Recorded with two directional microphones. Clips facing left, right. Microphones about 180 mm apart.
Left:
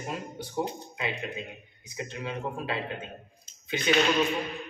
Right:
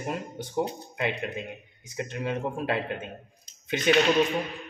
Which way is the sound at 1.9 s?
50° right (ahead or behind).